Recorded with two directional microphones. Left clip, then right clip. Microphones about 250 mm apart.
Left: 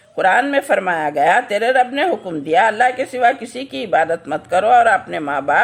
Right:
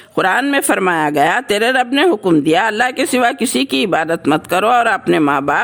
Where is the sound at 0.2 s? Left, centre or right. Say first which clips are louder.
Even; right.